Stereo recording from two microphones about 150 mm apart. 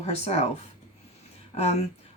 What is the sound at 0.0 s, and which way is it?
Speech, 45° left (ahead or behind).